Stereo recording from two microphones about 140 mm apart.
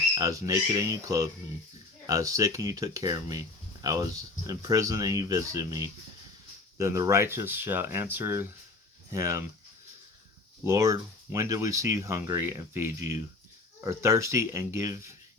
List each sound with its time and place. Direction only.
0.1 s speech: 25° right (ahead or behind)
10.6 s speech: 20° right (ahead or behind)